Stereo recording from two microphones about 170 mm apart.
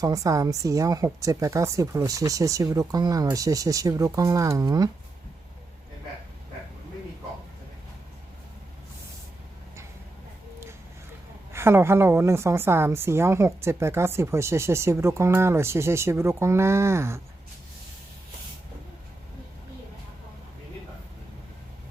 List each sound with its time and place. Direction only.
0.0 s a woman's voice: 20° right (ahead or behind)
11.5 s a woman's voice: 15° right (ahead or behind)